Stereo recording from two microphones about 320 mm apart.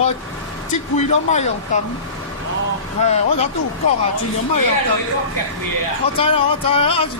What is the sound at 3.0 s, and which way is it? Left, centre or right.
Speech, left.